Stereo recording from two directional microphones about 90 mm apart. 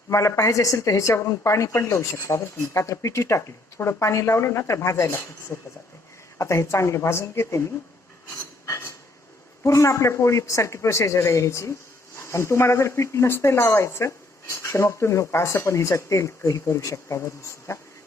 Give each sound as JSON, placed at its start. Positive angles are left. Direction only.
{"t": 0.1, "sound": "a woman's voice", "side_deg": 35}
{"t": 8.6, "sound": "cutlery", "side_deg": 30}
{"t": 9.6, "sound": "a woman's voice", "side_deg": 35}